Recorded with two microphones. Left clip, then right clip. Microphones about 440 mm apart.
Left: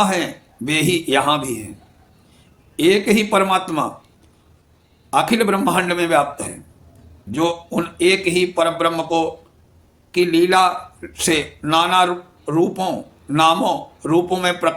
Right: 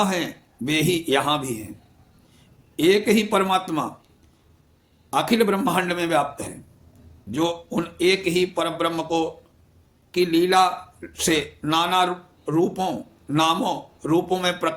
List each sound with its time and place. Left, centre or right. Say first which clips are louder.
0.0 s a man's voice: left 5 dB; right
2.7 s a man's voice: left 3 dB; right
5.1 s a man's voice: left 4 dB; right